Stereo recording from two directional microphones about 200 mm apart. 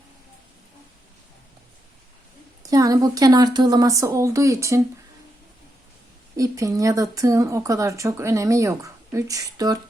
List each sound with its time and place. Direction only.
2.6 s speech: 15° right (ahead or behind)
6.3 s speech: 15° right (ahead or behind)